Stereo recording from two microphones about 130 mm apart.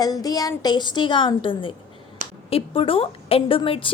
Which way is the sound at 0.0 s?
30° left (ahead or behind).